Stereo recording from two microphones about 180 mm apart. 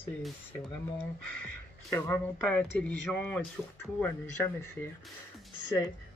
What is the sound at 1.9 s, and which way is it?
Speech, 15° left (ahead or behind).